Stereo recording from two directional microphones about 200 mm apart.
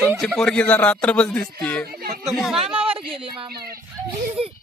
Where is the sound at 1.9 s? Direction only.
50° right (ahead or behind).